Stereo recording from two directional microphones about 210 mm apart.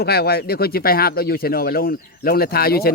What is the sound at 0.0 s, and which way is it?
Speech, 50° left (ahead or behind).